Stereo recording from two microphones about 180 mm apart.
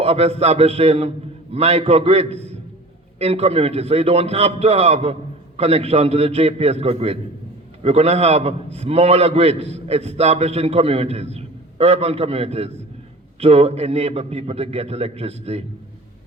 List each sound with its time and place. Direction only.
0.0 s a man's voice: 35° right (ahead or behind)